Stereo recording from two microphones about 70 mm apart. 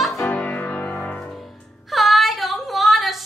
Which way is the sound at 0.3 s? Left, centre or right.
Left.